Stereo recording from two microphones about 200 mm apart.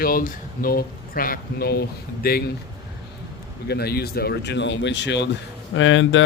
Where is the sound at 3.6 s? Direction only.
55° left (ahead or behind); by 6.2 s 70° left (ahead or behind).